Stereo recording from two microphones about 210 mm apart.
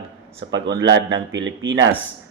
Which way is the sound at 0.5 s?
60° right (ahead or behind).